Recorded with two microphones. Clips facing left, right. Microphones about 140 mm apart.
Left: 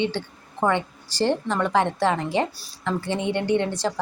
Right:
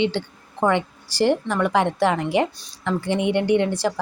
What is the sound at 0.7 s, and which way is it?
A woman's voice, 15° right (ahead or behind).